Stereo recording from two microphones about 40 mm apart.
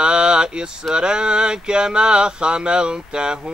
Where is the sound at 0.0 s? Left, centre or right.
Right.